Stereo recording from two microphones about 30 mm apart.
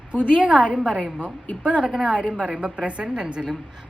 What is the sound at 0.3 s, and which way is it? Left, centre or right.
Speech, right.